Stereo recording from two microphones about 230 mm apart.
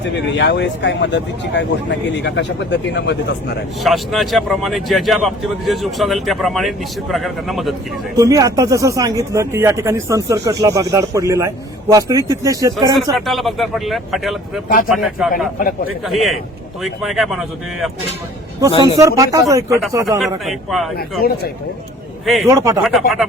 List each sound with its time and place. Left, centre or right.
0.3 s speech: left
3.8 s speech: centre
8.1 s speech: centre
13.1 s speech: centre
15.5 s a man's voice: left
16.0 s speech: centre
18.7 s a man's voice: centre
18.9 s speech: centre
20.1 s speech: centre
21.2 s a man's voice: left
22.4 s speech: centre
22.8 s speech: centre